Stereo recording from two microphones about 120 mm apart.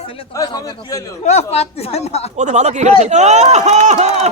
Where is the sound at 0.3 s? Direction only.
30° left (ahead or behind).